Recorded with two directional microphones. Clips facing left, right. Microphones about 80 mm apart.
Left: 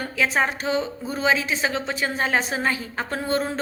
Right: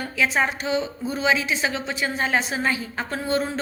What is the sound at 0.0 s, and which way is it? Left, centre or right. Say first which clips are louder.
A woman's voice: even; left.